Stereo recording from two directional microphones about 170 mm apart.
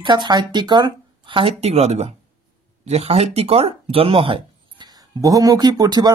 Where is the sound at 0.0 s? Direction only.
25° right (ahead or behind).